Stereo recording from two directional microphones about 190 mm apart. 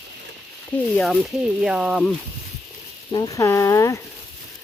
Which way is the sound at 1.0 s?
Centre (ahead or behind).